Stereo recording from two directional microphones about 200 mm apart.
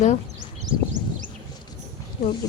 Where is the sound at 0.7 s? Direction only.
20° right (ahead or behind).